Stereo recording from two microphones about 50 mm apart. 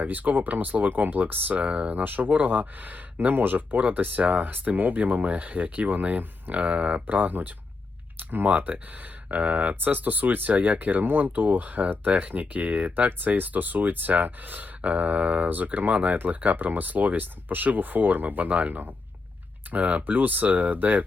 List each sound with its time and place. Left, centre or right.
0.0 s speech: right